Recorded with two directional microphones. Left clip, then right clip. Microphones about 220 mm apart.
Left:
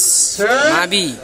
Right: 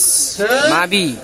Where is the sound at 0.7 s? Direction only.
15° right (ahead or behind).